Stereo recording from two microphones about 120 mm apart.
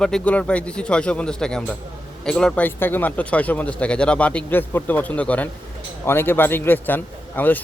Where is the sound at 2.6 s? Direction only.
15° left (ahead or behind).